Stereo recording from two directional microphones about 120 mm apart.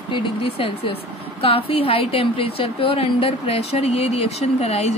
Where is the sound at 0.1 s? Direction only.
50° left (ahead or behind).